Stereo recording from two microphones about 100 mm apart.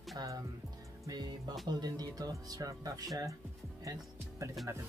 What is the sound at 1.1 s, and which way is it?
Music, 45° right (ahead or behind).